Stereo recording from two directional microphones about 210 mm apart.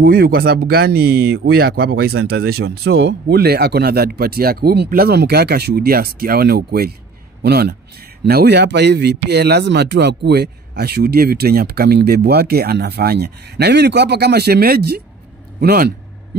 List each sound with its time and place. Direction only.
0.0 s a man's voice: 45° right (ahead or behind)